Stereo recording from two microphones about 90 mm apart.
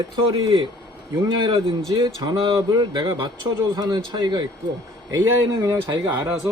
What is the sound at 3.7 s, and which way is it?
A man's voice, 50° right (ahead or behind).